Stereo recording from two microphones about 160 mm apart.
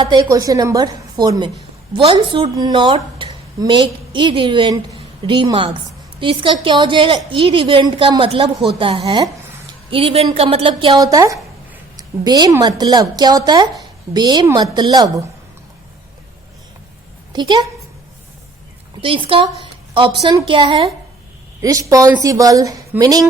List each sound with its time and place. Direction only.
0.0 s a woman's voice: 25° right (ahead or behind)
17.3 s a woman's voice: 25° right (ahead or behind)
19.0 s a woman's voice: 35° right (ahead or behind)
21.6 s a woman's voice: 20° right (ahead or behind)